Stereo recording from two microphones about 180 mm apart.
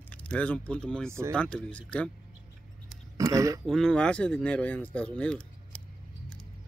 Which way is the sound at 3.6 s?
5° left (ahead or behind).